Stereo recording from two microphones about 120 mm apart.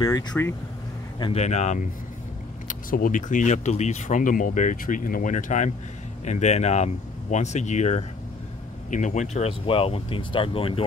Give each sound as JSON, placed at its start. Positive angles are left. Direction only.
{"t": 0.0, "sound": "speech", "side_deg": 30}
{"t": 1.3, "sound": "speech", "side_deg": 70}
{"t": 2.7, "sound": "speech", "side_deg": 90}
{"t": 6.2, "sound": "speech", "side_deg": 70}